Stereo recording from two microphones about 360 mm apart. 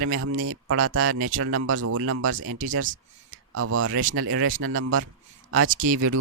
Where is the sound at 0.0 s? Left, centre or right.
Right.